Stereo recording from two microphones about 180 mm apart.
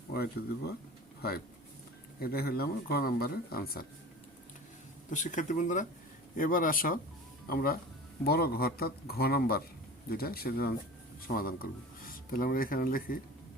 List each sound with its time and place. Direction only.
0.1 s speech: 60° left (ahead or behind)
5.1 s speech: 45° left (ahead or behind)